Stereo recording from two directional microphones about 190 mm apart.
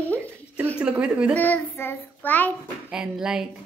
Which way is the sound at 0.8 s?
5° right (ahead or behind).